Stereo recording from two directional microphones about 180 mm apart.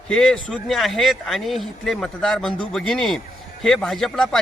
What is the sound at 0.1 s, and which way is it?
Speech, 5° left (ahead or behind).